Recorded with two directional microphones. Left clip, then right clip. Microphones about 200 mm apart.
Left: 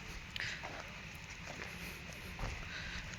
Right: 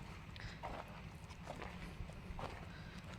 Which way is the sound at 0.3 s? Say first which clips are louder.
Left 9 dB; 5° right (ahead or behind).